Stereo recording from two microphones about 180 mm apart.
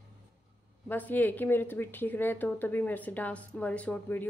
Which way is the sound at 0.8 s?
10° left (ahead or behind).